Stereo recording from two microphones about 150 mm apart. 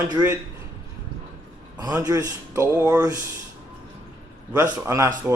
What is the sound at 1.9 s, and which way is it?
Speech, 20° right (ahead or behind).